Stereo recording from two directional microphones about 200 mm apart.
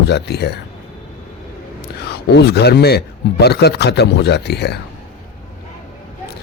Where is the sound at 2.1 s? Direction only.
55° left (ahead or behind).